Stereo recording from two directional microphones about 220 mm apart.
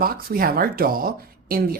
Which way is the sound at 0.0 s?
40° right (ahead or behind).